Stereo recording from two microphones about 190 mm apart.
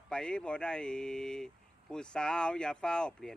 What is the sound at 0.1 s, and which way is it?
Speech, 5° left (ahead or behind).